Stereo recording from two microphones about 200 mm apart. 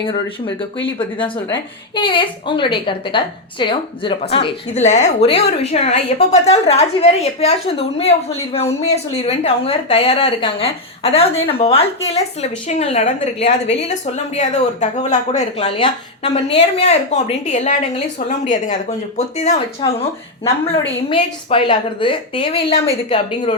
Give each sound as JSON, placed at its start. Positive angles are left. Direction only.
{"t": 0.0, "sound": "speech", "side_deg": 25}
{"t": 9.1, "sound": "speech", "side_deg": 30}
{"t": 19.8, "sound": "speech", "side_deg": 20}